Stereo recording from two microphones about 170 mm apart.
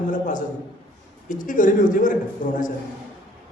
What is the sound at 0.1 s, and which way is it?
A man's voice, 50° left (ahead or behind).